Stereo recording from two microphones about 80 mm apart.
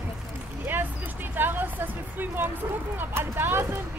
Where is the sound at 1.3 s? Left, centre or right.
Right.